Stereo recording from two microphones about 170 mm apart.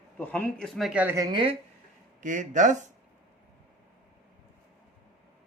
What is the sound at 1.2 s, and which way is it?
Speech, 30° right (ahead or behind).